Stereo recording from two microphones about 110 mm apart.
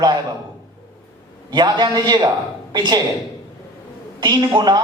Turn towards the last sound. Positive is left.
turn(degrees=-40)  # may be behind; listen again after turning